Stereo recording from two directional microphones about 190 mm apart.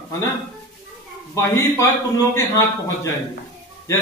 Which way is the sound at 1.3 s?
15° left (ahead or behind).